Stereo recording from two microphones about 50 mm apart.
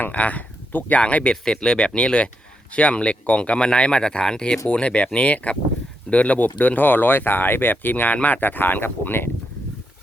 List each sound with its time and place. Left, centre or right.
0.0 s speech: left